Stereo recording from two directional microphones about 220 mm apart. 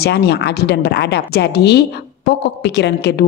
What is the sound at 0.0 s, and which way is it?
A woman's voice, 50° left (ahead or behind).